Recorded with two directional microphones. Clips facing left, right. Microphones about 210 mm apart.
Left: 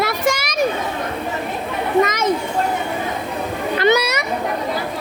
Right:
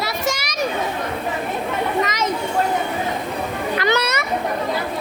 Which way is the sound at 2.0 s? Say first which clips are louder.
Left 3 dB; 50° left (ahead or behind).